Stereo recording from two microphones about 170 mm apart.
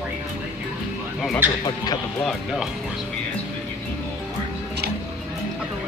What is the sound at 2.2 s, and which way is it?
Speech, centre (ahead or behind).